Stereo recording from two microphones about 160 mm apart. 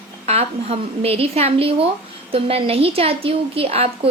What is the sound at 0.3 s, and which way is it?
A woman's voice, 40° right (ahead or behind).